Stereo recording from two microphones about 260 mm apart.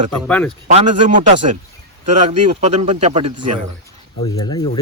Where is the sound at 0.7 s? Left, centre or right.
Right.